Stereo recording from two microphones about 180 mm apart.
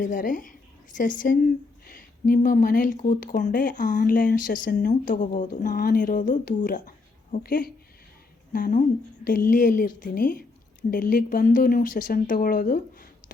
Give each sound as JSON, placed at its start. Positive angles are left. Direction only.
{"t": 0.0, "sound": "a woman's voice", "side_deg": 45}
{"t": 5.7, "sound": "a woman's voice", "side_deg": 55}